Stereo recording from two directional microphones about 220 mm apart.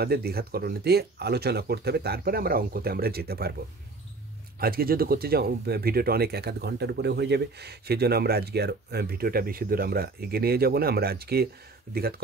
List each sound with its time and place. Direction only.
0.0 s speech: 45° right (ahead or behind)
4.6 s speech: 45° right (ahead or behind)